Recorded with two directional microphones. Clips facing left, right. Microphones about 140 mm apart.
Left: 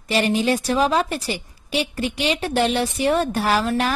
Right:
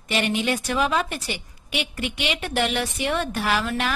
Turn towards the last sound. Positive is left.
turn(degrees=35)  # may be behind; listen again after turning